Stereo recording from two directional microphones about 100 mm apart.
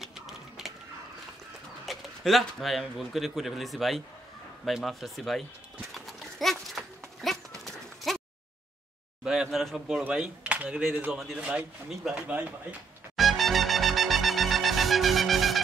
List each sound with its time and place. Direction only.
0.0 s a sound: 5° right (ahead or behind)
1.9 s a man's voice: centre (ahead or behind)
5.9 s dog: centre (ahead or behind)
9.2 s speech: 5° right (ahead or behind)
13.1 s wind instrument: centre (ahead or behind)